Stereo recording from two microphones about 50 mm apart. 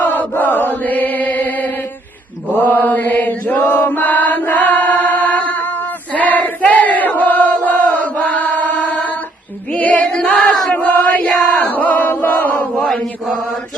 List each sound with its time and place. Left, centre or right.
0.0 s chant: left
6.1 s battle cry: left
9.7 s music: left
10.7 s chant: left
10.9 s chant: left
11.3 s a sound: centre
11.6 s chant: left
12.8 s chant: centre